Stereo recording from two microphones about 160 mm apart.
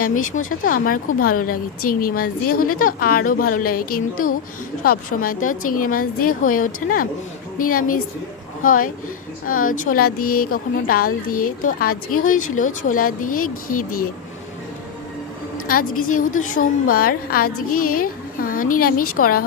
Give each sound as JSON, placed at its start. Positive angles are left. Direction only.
{"t": 0.0, "sound": "a woman's voice", "side_deg": 55}
{"t": 15.6, "sound": "a woman's voice", "side_deg": 65}